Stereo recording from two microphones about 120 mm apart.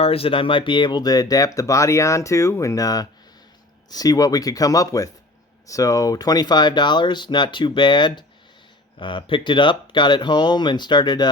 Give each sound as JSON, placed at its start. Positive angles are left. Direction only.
{"t": 0.0, "sound": "speech", "side_deg": 50}